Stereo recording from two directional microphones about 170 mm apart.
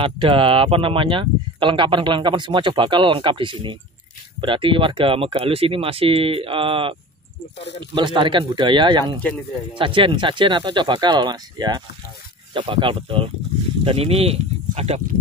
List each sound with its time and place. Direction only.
0.0 s speech: 30° right (ahead or behind)